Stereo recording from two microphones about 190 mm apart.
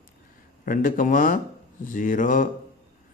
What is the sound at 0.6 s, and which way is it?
A man's voice, 45° left (ahead or behind).